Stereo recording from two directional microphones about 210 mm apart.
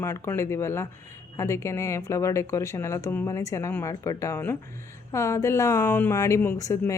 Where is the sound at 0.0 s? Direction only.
10° left (ahead or behind).